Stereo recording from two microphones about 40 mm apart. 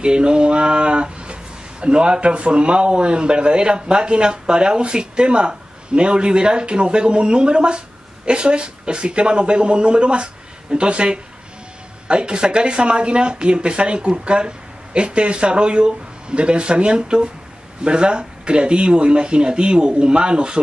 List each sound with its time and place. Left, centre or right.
0.0 s speech: right